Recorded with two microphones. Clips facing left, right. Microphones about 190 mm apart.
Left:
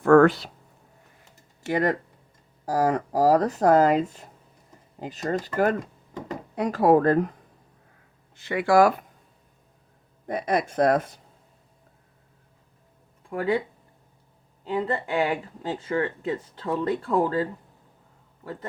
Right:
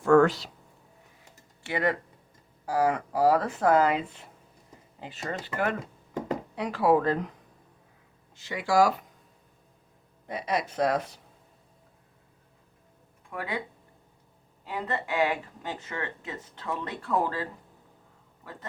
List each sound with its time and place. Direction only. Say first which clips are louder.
0.0 s a sound: left 4 dB; 55° left (ahead or behind)
1.6 s speech: left 4 dB; 40° left (ahead or behind)
8.4 s speech: left 5 dB; 55° left (ahead or behind)
10.2 s speech: left 5 dB; 50° left (ahead or behind)
13.3 s speech: left 10 dB; 30° left (ahead or behind)
14.6 s speech: left 6 dB; 30° left (ahead or behind)